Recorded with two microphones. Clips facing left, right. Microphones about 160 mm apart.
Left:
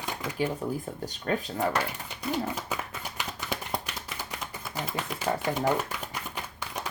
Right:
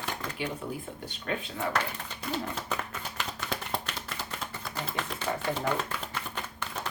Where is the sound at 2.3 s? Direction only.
10° left (ahead or behind).